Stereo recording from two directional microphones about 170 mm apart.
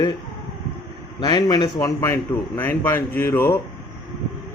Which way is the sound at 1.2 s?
25° left (ahead or behind).